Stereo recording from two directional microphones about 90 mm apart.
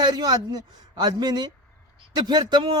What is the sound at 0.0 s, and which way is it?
A man's voice, 50° right (ahead or behind).